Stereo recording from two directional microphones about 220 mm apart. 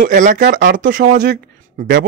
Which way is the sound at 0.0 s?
35° right (ahead or behind).